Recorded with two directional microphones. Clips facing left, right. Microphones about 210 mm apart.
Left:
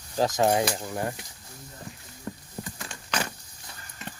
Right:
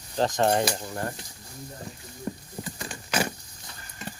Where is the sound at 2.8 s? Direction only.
5° right (ahead or behind).